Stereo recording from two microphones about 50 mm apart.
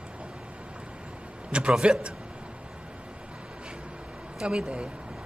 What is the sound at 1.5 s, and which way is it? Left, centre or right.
Speech, right.